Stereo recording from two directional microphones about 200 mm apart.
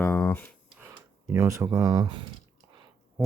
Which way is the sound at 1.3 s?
15° right (ahead or behind).